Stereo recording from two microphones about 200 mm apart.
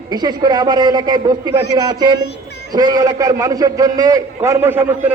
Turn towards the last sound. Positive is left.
turn(degrees=-10)  # may be behind; listen again after turning